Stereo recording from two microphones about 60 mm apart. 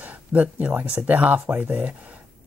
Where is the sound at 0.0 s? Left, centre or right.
Right.